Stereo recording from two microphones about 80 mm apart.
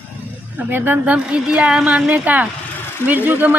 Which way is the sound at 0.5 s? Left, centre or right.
Right.